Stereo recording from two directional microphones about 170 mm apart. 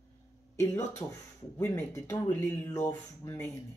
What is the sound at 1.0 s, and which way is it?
Speech, 10° left (ahead or behind).